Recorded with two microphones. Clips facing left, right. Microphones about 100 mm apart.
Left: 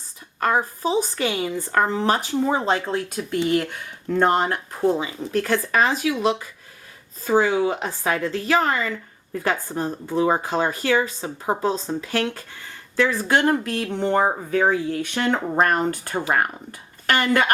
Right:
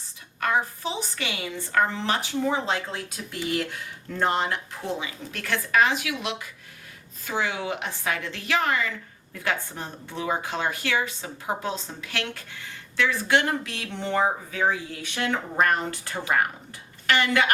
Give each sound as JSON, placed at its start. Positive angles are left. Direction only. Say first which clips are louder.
{"t": 0.3, "sound": "speech", "louder": "left 4 dB", "side_deg": 40}